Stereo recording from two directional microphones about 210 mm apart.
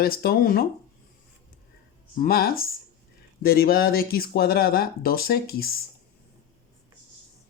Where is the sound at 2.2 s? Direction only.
45° left (ahead or behind).